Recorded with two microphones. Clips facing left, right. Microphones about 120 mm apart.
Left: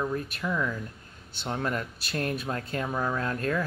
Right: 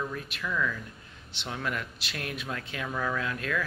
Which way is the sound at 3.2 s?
40° left (ahead or behind).